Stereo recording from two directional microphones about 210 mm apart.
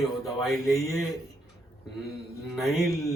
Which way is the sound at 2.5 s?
Centre (ahead or behind).